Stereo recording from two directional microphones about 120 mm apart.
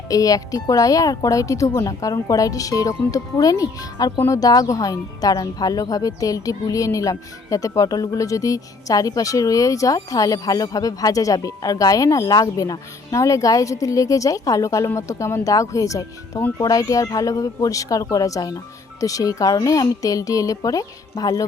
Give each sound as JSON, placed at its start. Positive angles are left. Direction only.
{"t": 0.1, "sound": "a woman's voice", "side_deg": 30}